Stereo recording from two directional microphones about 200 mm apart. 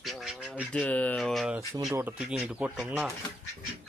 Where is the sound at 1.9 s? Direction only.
10° right (ahead or behind).